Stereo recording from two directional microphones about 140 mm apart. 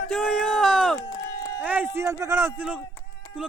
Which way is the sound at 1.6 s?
15° right (ahead or behind).